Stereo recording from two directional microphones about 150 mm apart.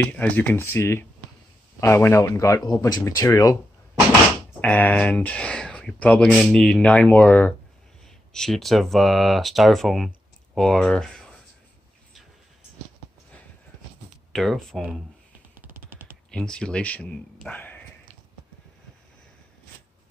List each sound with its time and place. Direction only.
0.0 s speech: 10° left (ahead or behind)
4.6 s speech: 10° left (ahead or behind)
14.3 s speech: centre (ahead or behind)
16.3 s speech: 5° left (ahead or behind)
17.5 s a sound: 10° left (ahead or behind)